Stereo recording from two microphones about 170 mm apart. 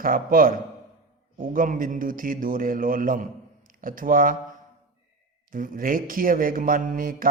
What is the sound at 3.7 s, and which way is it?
Speech, 55° right (ahead or behind).